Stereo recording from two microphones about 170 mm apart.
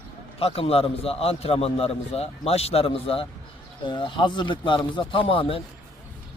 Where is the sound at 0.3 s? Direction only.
35° left (ahead or behind).